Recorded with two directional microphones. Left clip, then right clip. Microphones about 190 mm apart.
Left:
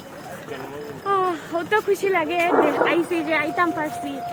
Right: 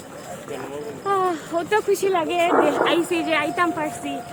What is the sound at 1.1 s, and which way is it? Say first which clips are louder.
Speech: even; 30° right (ahead or behind).